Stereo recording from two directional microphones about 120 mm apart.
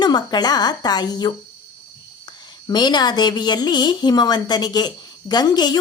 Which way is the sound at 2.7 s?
35° left (ahead or behind).